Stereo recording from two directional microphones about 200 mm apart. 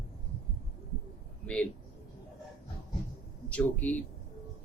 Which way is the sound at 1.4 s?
5° left (ahead or behind).